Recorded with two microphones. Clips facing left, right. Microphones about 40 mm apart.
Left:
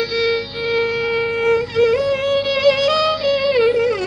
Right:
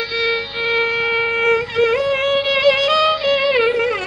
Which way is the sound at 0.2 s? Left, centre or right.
Right.